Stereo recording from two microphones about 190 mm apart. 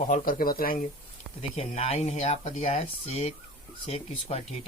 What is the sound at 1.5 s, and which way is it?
Speech, 35° left (ahead or behind).